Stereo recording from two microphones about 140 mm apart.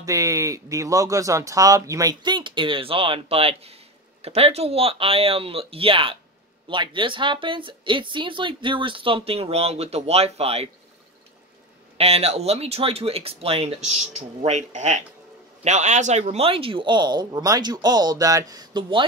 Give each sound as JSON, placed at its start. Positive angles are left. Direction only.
{"t": 0.0, "sound": "speech", "side_deg": -25}
{"t": 12.0, "sound": "speech", "side_deg": -45}